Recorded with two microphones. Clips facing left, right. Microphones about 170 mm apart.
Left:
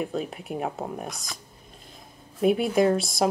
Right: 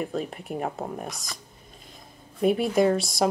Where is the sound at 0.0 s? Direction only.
Centre (ahead or behind).